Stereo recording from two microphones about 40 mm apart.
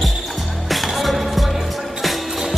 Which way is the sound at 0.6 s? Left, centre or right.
Centre.